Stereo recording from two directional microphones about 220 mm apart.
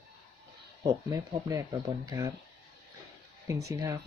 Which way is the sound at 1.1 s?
15° right (ahead or behind).